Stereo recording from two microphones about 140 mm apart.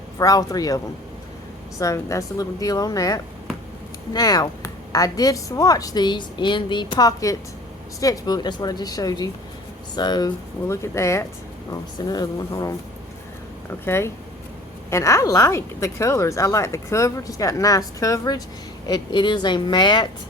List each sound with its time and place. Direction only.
0.2 s speech: 25° left (ahead or behind)
1.8 s speech: 20° left (ahead or behind)
13.8 s speech: 20° left (ahead or behind)